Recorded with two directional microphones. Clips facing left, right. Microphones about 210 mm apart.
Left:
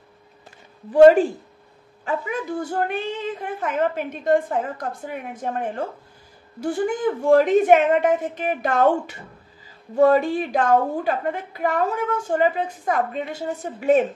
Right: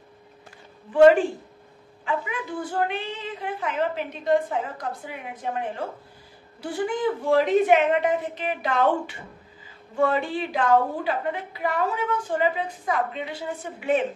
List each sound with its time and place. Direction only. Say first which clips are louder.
0.9 s a woman's voice: left 3 dB; 40° left (ahead or behind)